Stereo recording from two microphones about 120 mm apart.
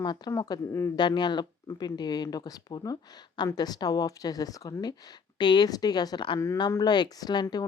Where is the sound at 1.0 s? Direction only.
40° left (ahead or behind).